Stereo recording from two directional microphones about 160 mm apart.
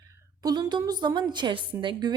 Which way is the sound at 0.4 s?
25° right (ahead or behind).